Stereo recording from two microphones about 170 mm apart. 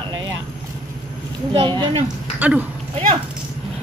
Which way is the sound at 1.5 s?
25° right (ahead or behind).